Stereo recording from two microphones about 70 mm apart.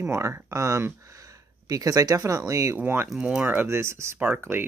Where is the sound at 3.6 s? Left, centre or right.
Right.